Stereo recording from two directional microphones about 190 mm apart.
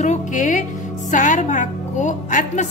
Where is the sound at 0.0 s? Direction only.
40° left (ahead or behind).